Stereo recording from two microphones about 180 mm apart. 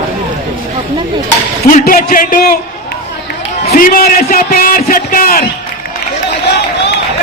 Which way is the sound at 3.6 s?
50° left (ahead or behind).